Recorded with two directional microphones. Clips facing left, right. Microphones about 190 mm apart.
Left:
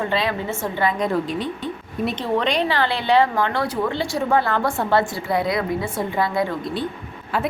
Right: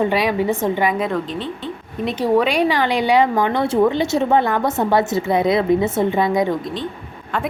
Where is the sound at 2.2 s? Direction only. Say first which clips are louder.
Right 7 dB; 10° right (ahead or behind).